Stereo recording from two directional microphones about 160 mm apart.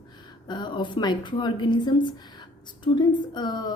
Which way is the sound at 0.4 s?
30° left (ahead or behind).